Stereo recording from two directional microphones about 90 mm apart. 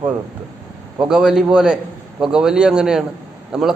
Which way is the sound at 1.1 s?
10° right (ahead or behind).